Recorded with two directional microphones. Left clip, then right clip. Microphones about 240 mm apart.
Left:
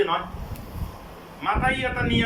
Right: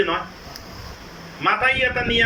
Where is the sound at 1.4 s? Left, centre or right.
Right.